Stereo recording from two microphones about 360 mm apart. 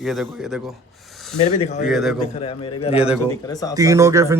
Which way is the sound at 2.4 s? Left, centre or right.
Centre.